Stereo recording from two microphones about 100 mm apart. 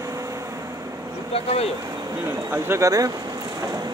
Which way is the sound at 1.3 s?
90° left.